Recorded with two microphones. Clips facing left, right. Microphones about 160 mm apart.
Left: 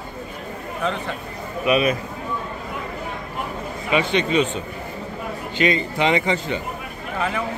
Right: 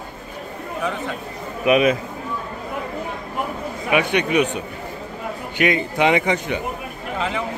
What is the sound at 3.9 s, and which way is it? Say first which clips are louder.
Speech: right 1 dB; 15° right (ahead or behind).